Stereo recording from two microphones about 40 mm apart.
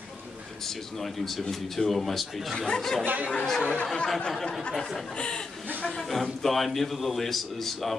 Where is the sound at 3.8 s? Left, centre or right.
Centre.